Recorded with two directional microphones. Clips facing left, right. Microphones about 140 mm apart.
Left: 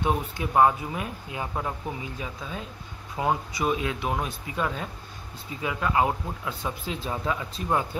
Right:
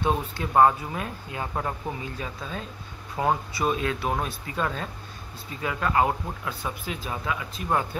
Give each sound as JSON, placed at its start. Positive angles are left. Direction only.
{"t": 0.0, "sound": "speech", "side_deg": 15}
{"t": 7.9, "sound": "speech", "side_deg": 20}